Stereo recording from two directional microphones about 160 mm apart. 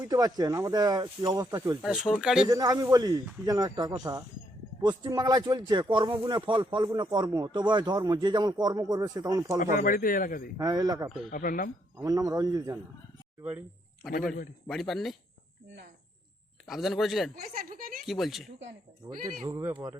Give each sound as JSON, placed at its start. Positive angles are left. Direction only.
{"t": 0.0, "sound": "speech", "side_deg": -25}
{"t": 1.8, "sound": "a man's voice", "side_deg": -5}
{"t": 2.5, "sound": "speech", "side_deg": -25}
{"t": 9.7, "sound": "speech", "side_deg": 60}
{"t": 10.6, "sound": "speech", "side_deg": -25}
{"t": 11.3, "sound": "speech", "side_deg": 55}
{"t": 11.9, "sound": "speech", "side_deg": -20}
{"t": 14.7, "sound": "a man's voice", "side_deg": 0}
{"t": 16.6, "sound": "a man's voice", "side_deg": 0}
{"t": 17.3, "sound": "a woman's voice", "side_deg": -65}
{"t": 18.0, "sound": "a man's voice", "side_deg": 0}
{"t": 19.5, "sound": "speech", "side_deg": -15}